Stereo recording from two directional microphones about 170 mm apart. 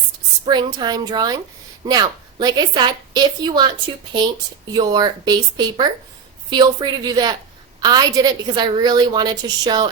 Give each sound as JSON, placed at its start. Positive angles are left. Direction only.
{"t": 0.4, "sound": "a woman's voice", "side_deg": -25}
{"t": 4.7, "sound": "a woman's voice", "side_deg": -20}